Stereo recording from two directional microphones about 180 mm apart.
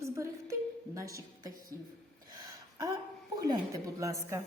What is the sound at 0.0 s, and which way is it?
Music, 15° right (ahead or behind).